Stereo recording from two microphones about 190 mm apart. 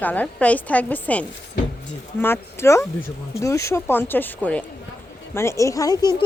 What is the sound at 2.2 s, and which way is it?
Speech, 10° left (ahead or behind).